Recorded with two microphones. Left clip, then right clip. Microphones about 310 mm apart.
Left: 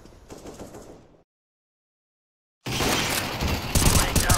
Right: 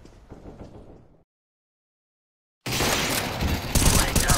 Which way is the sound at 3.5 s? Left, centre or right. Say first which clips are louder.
Left 1 dB; centre.